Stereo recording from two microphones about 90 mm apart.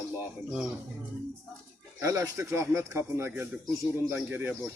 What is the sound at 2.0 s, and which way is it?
Speech, 35° right (ahead or behind).